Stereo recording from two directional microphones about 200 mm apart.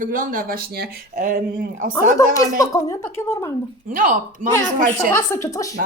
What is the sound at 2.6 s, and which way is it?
Speech, 15° left (ahead or behind).